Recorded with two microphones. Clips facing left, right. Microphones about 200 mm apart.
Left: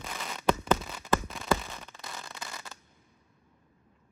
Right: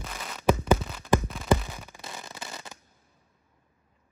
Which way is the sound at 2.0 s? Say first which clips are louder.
Right 2 dB; 20° right (ahead or behind).